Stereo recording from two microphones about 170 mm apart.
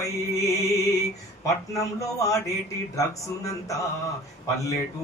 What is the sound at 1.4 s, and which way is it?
Speech, 20° left (ahead or behind).